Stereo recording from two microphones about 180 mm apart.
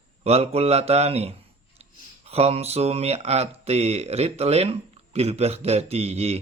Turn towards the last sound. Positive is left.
turn(degrees=-35)  # may be behind; listen again after turning